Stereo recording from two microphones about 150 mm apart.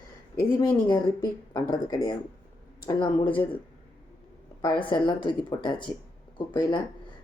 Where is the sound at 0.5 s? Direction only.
25° left (ahead or behind).